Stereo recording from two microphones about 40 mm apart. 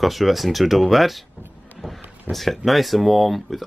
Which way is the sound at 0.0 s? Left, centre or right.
Centre.